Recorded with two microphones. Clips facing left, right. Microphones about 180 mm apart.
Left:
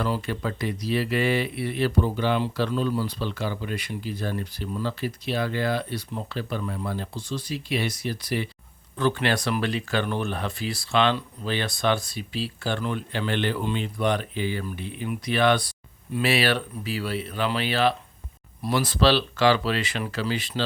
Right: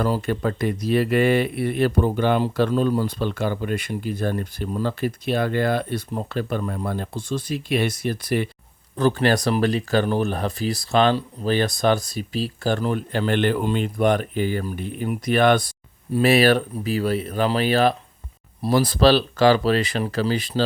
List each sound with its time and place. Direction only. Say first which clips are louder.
0.0 s speech: right 5 dB; 45° right (ahead or behind)
9.0 s speech: right 5 dB; 40° right (ahead or behind)